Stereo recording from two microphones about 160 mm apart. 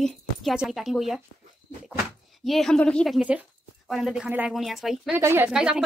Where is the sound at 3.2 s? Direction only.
5° right (ahead or behind).